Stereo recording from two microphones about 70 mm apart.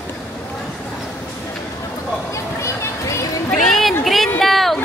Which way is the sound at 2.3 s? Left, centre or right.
Left.